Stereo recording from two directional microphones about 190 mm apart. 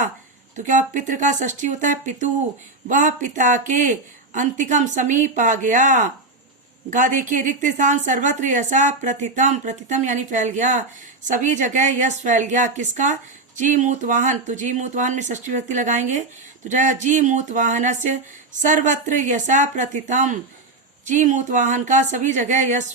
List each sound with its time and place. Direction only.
0.5 s a woman's voice: 40° right (ahead or behind)